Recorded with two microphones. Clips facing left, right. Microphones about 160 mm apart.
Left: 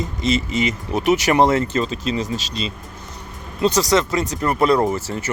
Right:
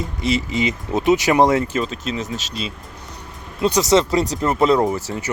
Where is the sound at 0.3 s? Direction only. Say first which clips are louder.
Even; 15° right (ahead or behind).